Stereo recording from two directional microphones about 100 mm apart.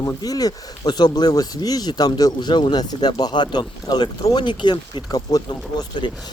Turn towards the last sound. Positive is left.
turn(degrees=50)  # may be behind; listen again after turning